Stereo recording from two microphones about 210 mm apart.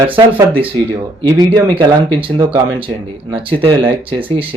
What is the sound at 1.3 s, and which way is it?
Speech, 20° right (ahead or behind).